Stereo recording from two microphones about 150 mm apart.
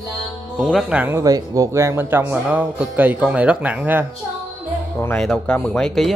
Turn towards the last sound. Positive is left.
turn(degrees=5)  # may be behind; listen again after turning